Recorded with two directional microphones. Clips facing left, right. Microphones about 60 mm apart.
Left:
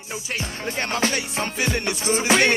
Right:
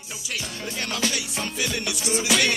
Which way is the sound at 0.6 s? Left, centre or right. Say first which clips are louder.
Left 5 dB; left.